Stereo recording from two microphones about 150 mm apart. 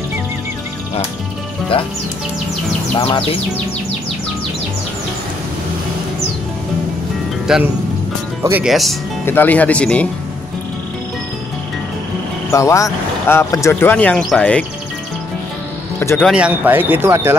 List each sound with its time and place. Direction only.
3.0 s music: 40° left (ahead or behind)
7.5 s speech: 5° right (ahead or behind)
9.2 s speech: 15° left (ahead or behind)
12.4 s speech: 20° left (ahead or behind)
16.0 s speech: 15° left (ahead or behind)
16.3 s speech: 5° right (ahead or behind)